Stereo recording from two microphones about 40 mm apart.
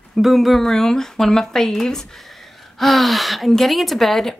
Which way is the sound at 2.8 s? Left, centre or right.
Centre.